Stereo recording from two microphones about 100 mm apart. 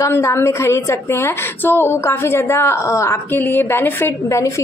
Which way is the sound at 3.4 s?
20° left (ahead or behind).